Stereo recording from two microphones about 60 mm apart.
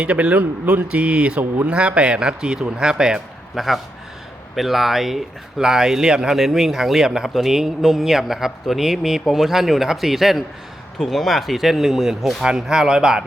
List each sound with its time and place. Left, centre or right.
0.0 s speech: right
0.9 s speech: centre